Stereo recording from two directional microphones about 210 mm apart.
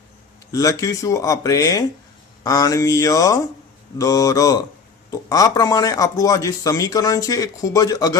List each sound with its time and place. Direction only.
0.5 s speech: 15° left (ahead or behind)